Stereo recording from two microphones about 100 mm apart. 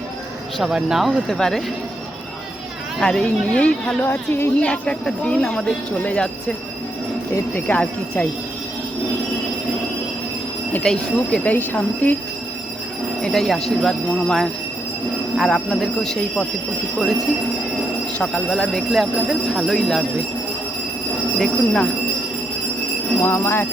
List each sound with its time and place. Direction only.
0.6 s speech: 5° right (ahead or behind)
3.0 s speech: 5° left (ahead or behind)
4.0 s jingle bell: 20° left (ahead or behind)
4.6 s speech: 10° left (ahead or behind)
7.5 s speech: 15° left (ahead or behind)
10.8 s speech: 10° left (ahead or behind)
13.2 s speech: 5° left (ahead or behind)
18.2 s speech: 5° left (ahead or behind)
21.3 s speech: 5° left (ahead or behind)
23.2 s jingle bell: 25° left (ahead or behind)